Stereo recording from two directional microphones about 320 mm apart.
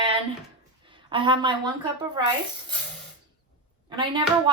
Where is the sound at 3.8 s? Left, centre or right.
Centre.